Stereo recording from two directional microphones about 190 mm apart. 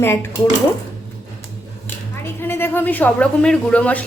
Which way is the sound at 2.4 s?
10° left (ahead or behind).